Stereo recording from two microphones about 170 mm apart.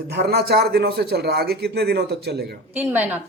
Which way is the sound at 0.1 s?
70° right (ahead or behind).